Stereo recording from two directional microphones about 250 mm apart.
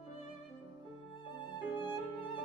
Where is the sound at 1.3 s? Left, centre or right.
Centre.